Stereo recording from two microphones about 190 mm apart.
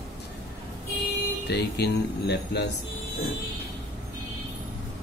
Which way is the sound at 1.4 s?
60° left (ahead or behind).